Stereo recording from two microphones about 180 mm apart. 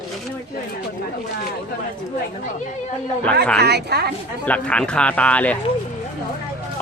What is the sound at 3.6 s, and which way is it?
Speech, 65° right (ahead or behind).